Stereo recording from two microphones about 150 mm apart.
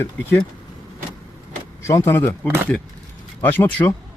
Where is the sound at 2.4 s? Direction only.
15° right (ahead or behind).